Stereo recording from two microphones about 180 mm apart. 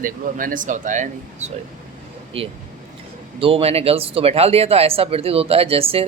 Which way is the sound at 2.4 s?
30° right (ahead or behind).